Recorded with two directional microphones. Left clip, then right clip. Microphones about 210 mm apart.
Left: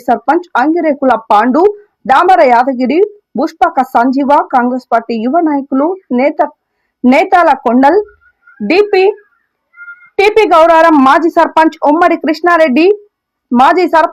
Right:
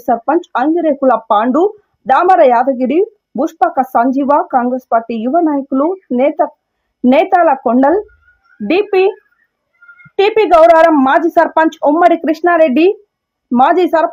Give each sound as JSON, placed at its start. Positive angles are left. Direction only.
{"t": 0.0, "sound": "speech", "side_deg": 10}
{"t": 10.2, "sound": "speech", "side_deg": 15}